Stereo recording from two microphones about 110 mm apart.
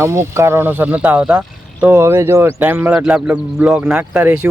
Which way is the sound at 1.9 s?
25° right (ahead or behind).